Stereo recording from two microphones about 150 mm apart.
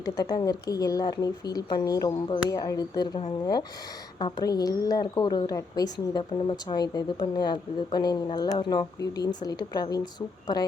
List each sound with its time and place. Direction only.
0.0 s a woman's voice: 25° left (ahead or behind)
4.2 s a woman's voice: 25° left (ahead or behind)